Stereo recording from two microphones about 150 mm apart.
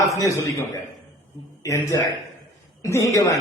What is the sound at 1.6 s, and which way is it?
A man's voice, 20° left (ahead or behind).